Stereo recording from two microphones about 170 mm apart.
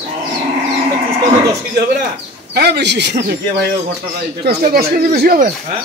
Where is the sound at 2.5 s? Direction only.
80° right; by 5.5 s 65° right (ahead or behind).